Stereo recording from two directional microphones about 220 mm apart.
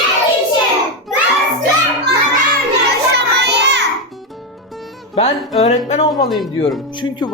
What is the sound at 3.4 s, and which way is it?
Child singing, 50° right (ahead or behind).